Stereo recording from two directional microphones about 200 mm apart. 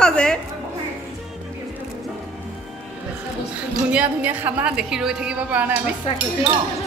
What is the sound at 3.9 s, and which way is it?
A woman's voice, 5° right (ahead or behind).